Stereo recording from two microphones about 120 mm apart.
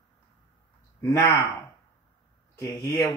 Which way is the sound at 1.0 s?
30° left (ahead or behind).